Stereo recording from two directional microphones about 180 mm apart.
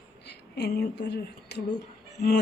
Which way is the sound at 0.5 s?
60° left (ahead or behind).